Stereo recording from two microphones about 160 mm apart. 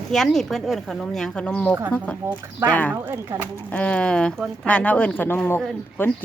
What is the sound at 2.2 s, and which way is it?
Speech, 20° right (ahead or behind).